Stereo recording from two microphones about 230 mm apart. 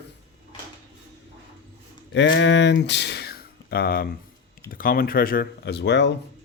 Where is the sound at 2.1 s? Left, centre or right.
Left.